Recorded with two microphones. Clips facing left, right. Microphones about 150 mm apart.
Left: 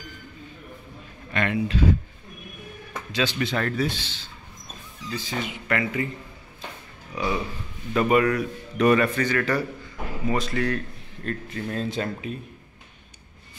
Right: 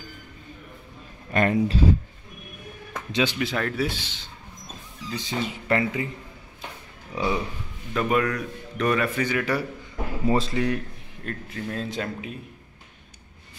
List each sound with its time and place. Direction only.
1.3 s speech: 40° right (ahead or behind)
3.1 s speech: 15° right (ahead or behind)
3.3 s speech: 5° right (ahead or behind); by 6.0 s 25° right (ahead or behind)
7.1 s speech: 25° right (ahead or behind)
7.9 s speech: 5° left (ahead or behind)
9.2 s a man's voice: 10° right (ahead or behind)
10.2 s speech: 30° right (ahead or behind)
10.5 s a man's voice: 15° right (ahead or behind)
11.2 s speech: centre (ahead or behind)